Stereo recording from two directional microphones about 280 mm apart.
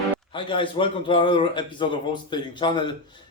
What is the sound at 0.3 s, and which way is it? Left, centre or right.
A man's voice, centre.